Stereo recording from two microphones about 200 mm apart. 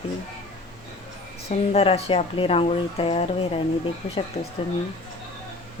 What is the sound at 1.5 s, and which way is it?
Speech, 30° left (ahead or behind).